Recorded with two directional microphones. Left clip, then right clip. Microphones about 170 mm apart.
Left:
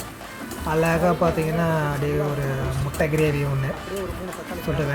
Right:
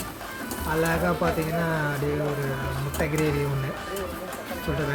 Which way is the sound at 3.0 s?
20° left (ahead or behind).